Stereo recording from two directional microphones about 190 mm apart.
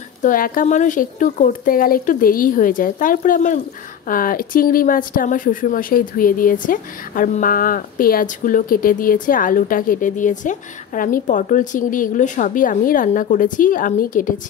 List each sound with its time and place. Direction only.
0.2 s speech: 45° left (ahead or behind)